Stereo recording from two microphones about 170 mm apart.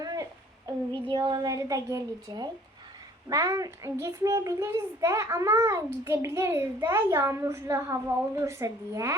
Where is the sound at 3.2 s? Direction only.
20° right (ahead or behind).